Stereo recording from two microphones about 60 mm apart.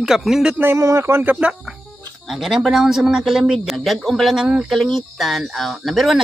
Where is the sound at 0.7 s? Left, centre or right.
Right.